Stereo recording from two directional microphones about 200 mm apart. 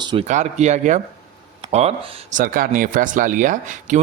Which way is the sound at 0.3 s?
35° right (ahead or behind).